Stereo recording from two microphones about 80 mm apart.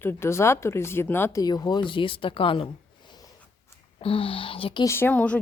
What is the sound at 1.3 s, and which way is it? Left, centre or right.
A woman's voice, left.